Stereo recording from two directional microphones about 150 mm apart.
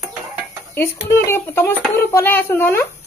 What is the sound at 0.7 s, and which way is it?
A child's voice, 15° left (ahead or behind).